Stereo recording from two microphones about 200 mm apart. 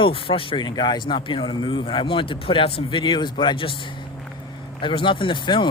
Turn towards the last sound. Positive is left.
turn(degrees=25)  # may be behind; listen again after turning